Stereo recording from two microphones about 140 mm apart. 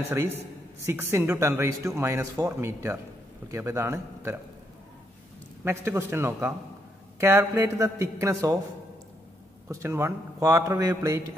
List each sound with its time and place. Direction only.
0.8 s speech: 15° right (ahead or behind)
5.6 s speech: 15° right (ahead or behind)
9.7 s speech: 20° right (ahead or behind)